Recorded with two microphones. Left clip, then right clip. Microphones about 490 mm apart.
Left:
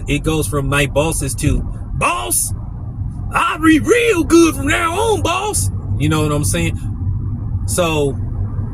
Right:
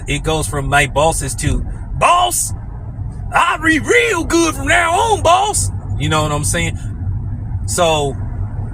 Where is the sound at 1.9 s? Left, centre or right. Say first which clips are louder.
Right 6 dB; left.